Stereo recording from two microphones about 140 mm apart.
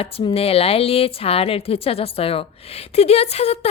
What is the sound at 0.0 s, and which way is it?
A woman's voice, 40° left (ahead or behind).